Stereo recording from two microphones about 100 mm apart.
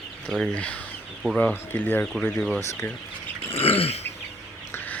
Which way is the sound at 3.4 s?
75° left (ahead or behind).